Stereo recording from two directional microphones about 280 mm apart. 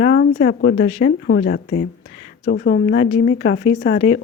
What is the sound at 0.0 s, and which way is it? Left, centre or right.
A woman's voice, left.